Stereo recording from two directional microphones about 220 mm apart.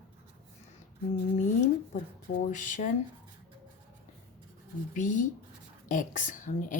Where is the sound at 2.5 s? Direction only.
35° left (ahead or behind).